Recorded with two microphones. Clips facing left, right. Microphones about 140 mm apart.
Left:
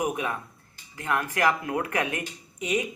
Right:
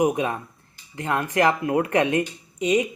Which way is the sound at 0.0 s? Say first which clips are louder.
Right 7 dB; 25° right (ahead or behind).